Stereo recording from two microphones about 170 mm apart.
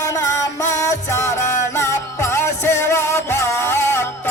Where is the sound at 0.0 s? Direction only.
20° left (ahead or behind).